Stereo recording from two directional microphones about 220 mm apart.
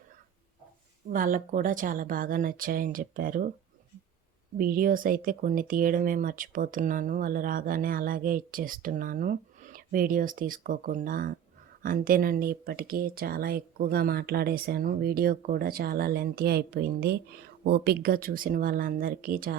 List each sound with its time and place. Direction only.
1.1 s speech: 40° right (ahead or behind)
4.5 s speech: 40° right (ahead or behind)